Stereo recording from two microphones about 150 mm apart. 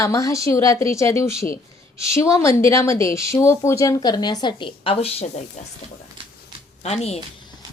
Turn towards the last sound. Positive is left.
turn(degrees=45)  # may be behind; listen again after turning